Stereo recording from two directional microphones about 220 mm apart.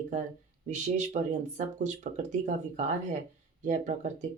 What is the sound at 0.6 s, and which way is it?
Speech, 35° right (ahead or behind).